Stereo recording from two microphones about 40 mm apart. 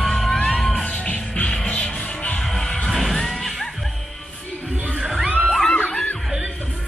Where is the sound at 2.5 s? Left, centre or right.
Centre.